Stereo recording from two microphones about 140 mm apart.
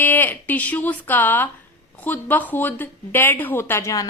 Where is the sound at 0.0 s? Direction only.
15° left (ahead or behind).